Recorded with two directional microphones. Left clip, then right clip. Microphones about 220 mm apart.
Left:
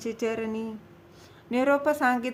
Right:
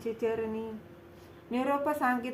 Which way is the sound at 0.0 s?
45° left (ahead or behind).